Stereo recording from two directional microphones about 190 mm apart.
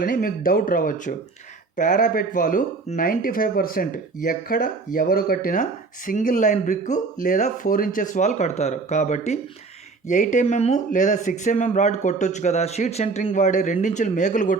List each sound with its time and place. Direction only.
0.0 s speech: 45° left (ahead or behind)